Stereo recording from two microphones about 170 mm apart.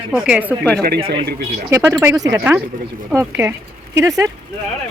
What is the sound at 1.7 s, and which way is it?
Speech, 15° right (ahead or behind).